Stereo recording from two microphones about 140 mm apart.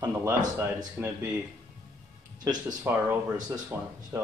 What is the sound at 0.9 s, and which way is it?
Speech, 15° right (ahead or behind).